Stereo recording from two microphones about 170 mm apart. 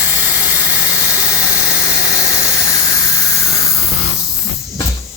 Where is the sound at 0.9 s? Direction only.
15° left (ahead or behind).